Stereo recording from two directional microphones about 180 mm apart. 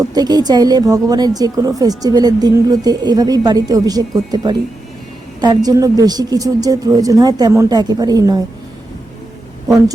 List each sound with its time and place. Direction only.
0.0 s a woman's voice: 20° right (ahead or behind)